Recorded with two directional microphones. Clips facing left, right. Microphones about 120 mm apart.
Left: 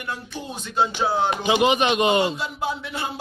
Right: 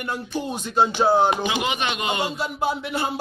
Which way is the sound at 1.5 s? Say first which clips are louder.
Left 6 dB; 30° left (ahead or behind).